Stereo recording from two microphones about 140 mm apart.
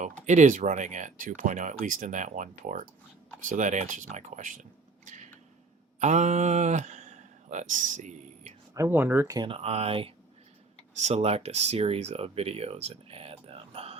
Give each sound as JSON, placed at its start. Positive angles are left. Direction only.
{"t": 0.3, "sound": "speech", "side_deg": -60}
{"t": 5.0, "sound": "a sound", "side_deg": -60}
{"t": 6.0, "sound": "speech", "side_deg": -55}
{"t": 8.7, "sound": "speech", "side_deg": -20}
{"t": 9.3, "sound": "speech", "side_deg": -30}
{"t": 9.6, "sound": "speech", "side_deg": -45}